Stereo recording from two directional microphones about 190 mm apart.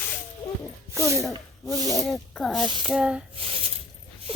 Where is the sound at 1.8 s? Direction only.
20° left (ahead or behind).